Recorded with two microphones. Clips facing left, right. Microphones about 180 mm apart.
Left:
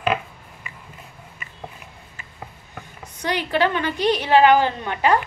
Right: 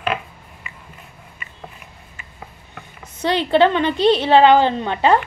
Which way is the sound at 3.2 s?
25° right (ahead or behind).